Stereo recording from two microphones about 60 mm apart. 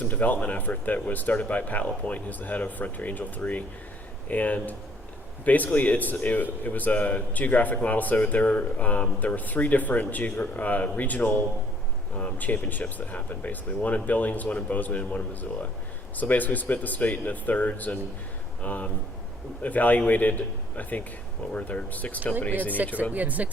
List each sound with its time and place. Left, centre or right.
0.0 s a man's voice: left
22.8 s speech: right